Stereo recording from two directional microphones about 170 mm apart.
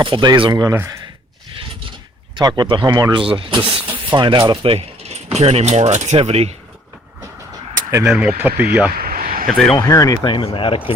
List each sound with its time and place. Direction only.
0.0 s speech: 25° right (ahead or behind)
2.3 s speech: 25° right (ahead or behind)
8.0 s speech: 5° right (ahead or behind)
8.9 s a sound: 60° right (ahead or behind)
9.5 s speech: centre (ahead or behind)
9.7 s speech: 20° left (ahead or behind)